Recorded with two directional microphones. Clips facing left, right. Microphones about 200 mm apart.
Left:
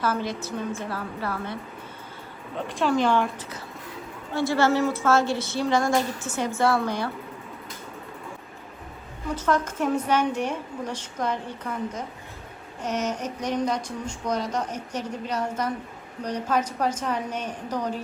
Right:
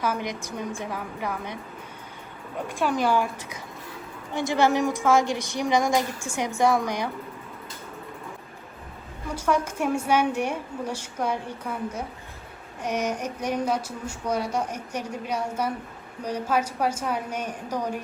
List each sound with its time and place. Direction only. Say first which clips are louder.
0.0 s speech: left 1 dB; 15° right (ahead or behind)
2.7 s speech: left 2 dB; 10° right (ahead or behind)
4.4 s speech: even; 15° right (ahead or behind)
9.3 s speech: even; 10° right (ahead or behind)